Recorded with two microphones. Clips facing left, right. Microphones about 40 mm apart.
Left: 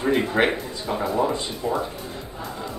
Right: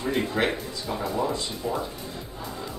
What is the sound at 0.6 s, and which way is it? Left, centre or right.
A man's voice, centre.